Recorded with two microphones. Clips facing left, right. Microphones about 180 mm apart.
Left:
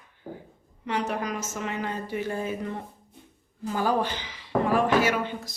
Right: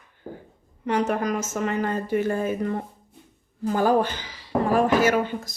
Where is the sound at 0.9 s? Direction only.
50° right (ahead or behind).